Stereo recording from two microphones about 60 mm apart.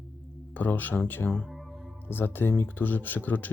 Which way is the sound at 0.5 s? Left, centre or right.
Left.